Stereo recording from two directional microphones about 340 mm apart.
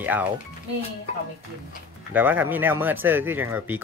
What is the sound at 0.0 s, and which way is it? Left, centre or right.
Speech, centre.